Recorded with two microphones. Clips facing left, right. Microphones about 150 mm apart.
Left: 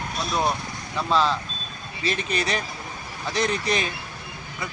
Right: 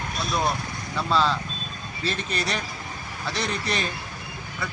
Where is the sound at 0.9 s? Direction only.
Centre (ahead or behind).